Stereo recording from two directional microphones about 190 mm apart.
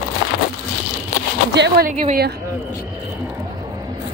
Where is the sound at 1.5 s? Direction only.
60° right (ahead or behind).